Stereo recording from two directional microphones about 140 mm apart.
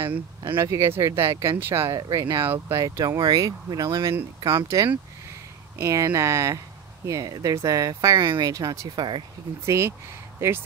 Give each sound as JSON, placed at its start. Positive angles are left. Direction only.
{"t": 0.6, "sound": "speech", "side_deg": -20}
{"t": 9.7, "sound": "speech", "side_deg": -20}